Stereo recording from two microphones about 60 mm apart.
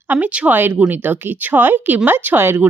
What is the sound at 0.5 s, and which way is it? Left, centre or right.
Speech, right.